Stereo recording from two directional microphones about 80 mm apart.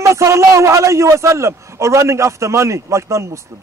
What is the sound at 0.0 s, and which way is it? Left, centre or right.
A man's voice, right.